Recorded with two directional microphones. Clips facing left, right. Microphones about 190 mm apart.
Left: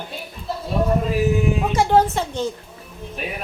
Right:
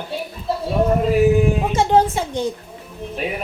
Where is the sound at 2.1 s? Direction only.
15° right (ahead or behind).